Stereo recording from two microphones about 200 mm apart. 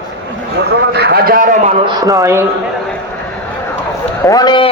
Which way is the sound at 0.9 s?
50° right (ahead or behind).